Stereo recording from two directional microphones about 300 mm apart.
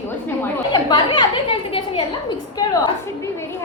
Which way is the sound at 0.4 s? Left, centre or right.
Centre.